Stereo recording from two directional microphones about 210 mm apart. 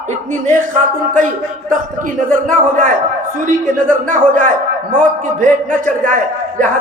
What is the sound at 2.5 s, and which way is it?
Speech, 40° right (ahead or behind).